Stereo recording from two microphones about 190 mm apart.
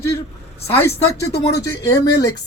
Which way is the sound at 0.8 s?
15° left (ahead or behind).